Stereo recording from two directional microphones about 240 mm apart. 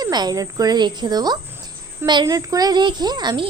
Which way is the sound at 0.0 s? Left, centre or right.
Centre.